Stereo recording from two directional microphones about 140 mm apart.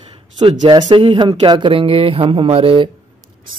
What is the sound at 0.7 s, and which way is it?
Speech, 35° right (ahead or behind).